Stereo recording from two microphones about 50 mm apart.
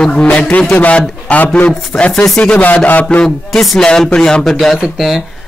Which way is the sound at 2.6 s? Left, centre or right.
Left.